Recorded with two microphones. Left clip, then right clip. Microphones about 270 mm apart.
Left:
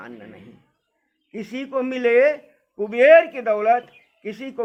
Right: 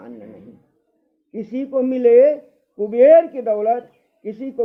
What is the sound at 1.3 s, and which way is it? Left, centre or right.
A man's voice, left.